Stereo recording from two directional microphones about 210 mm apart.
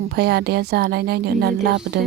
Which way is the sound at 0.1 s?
50° right (ahead or behind).